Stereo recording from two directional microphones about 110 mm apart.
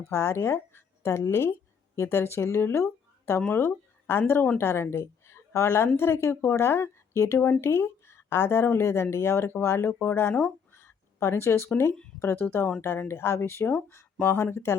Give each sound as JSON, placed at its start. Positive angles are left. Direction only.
{"t": 0.1, "sound": "speech", "side_deg": 25}
{"t": 10.7, "sound": "a sound", "side_deg": 25}
{"t": 12.2, "sound": "speech", "side_deg": 20}